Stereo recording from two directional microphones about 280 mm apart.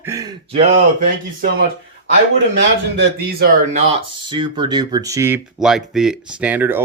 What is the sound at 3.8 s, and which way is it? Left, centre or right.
Speech, right.